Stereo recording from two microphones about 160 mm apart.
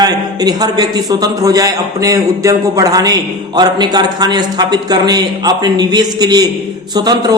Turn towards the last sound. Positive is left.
turn(degrees=-25)  # may be behind; listen again after turning